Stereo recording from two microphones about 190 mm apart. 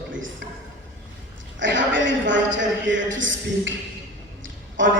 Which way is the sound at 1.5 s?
75° right (ahead or behind).